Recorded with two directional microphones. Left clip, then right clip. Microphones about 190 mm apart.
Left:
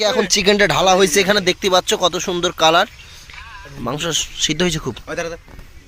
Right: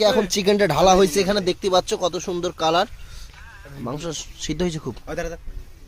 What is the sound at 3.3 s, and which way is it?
Music, 40° right (ahead or behind).